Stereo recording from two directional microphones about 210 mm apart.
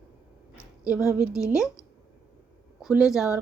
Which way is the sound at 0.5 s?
5° right (ahead or behind).